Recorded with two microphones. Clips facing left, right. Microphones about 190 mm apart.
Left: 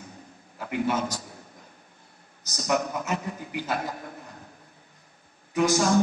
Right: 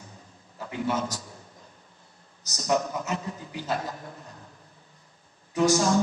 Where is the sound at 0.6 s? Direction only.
60° left (ahead or behind).